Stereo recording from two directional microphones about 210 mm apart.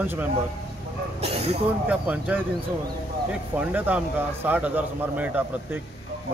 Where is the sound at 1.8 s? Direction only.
5° right (ahead or behind).